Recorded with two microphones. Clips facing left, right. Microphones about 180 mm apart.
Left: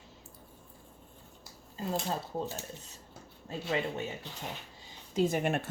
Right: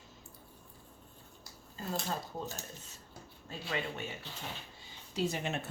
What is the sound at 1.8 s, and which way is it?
Speech, 25° left (ahead or behind).